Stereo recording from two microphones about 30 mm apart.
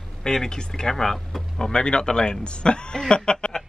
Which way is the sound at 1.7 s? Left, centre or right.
Left.